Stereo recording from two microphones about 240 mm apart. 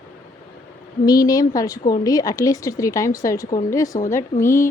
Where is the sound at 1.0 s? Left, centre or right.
Centre.